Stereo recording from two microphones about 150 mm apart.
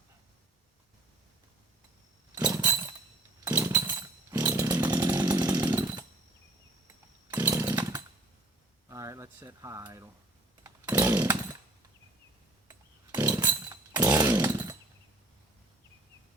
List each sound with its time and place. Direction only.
2.6 s chainsaw: 20° right (ahead or behind)
8.9 s speech: 20° right (ahead or behind)
10.6 s chainsaw: 15° right (ahead or behind)
13.1 s chainsaw: 20° right (ahead or behind)